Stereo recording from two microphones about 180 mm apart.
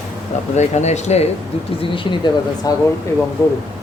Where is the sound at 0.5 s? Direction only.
40° left (ahead or behind).